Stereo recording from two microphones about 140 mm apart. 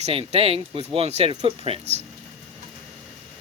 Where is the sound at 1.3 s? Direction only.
35° right (ahead or behind).